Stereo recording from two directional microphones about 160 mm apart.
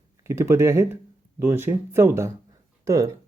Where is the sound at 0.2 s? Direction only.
15° right (ahead or behind).